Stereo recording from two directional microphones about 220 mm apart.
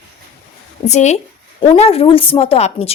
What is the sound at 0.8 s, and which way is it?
Speech, 30° left (ahead or behind).